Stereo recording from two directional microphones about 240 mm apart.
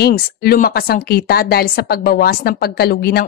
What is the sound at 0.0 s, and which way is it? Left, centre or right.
A woman's voice, left.